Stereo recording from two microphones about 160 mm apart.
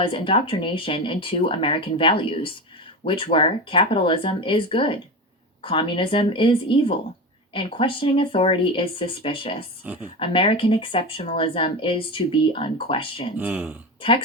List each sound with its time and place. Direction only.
0.0 s speech: 35° left (ahead or behind)
9.8 s speech: 10° right (ahead or behind)
10.2 s speech: 35° left (ahead or behind)
13.3 s speech: 10° right (ahead or behind)